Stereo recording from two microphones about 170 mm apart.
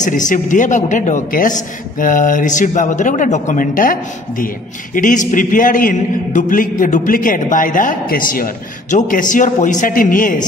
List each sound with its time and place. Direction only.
0.0 s a man's voice: 50° left (ahead or behind)